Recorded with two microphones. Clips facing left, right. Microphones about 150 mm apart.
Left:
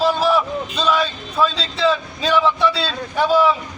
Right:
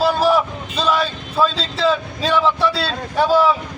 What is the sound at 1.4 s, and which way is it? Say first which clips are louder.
Speech: right 1 dB; 35° right (ahead or behind).